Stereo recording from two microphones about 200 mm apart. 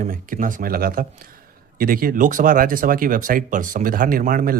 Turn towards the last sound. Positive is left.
turn(degrees=-45)  # may be behind; listen again after turning